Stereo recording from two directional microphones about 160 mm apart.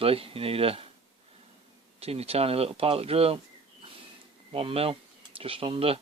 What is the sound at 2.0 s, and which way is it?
Speech, 40° right (ahead or behind).